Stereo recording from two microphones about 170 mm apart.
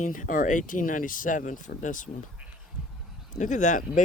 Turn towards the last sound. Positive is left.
turn(degrees=45)  # may be behind; listen again after turning